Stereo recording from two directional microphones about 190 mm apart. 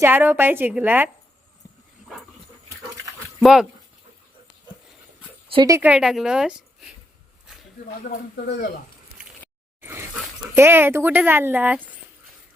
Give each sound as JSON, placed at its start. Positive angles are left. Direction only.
{"t": 0.0, "sound": "speech", "side_deg": -10}
{"t": 3.4, "sound": "a woman's voice", "side_deg": -5}
{"t": 5.5, "sound": "a sound", "side_deg": -25}
{"t": 5.7, "sound": "a woman's voice", "side_deg": -5}
{"t": 8.1, "sound": "speech", "side_deg": 40}
{"t": 9.8, "sound": "dog", "side_deg": -10}
{"t": 10.5, "sound": "speech", "side_deg": -10}